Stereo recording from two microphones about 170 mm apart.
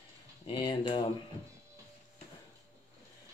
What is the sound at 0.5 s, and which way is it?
Speech, 25° left (ahead or behind).